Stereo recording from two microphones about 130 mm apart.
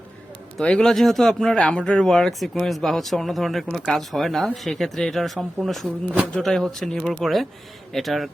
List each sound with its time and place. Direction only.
0.6 s speech: 5° left (ahead or behind)